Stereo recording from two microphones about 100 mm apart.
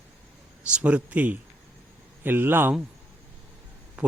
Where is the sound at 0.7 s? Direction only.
10° right (ahead or behind).